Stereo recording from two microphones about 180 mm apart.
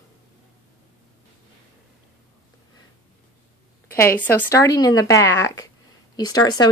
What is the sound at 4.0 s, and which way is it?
A woman's voice, 10° left (ahead or behind).